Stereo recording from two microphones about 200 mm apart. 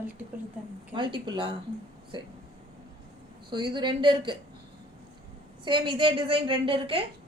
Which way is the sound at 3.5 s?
20° right (ahead or behind).